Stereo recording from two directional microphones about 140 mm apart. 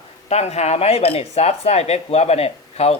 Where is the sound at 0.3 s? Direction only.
50° left (ahead or behind).